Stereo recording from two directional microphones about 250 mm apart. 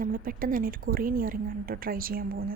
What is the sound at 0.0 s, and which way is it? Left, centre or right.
A woman's voice, right.